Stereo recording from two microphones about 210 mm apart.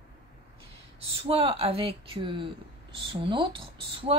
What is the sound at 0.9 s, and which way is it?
Speech, 25° right (ahead or behind).